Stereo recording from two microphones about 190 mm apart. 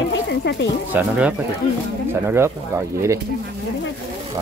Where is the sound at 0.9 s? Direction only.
10° right (ahead or behind).